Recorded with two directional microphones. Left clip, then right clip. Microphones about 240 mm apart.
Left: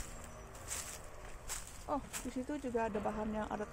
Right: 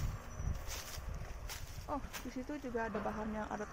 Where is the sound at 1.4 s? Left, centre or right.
Centre.